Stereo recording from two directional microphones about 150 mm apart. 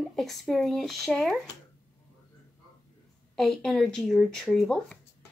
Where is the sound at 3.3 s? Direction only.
Centre (ahead or behind).